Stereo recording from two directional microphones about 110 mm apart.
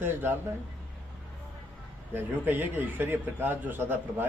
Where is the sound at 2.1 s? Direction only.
20° right (ahead or behind).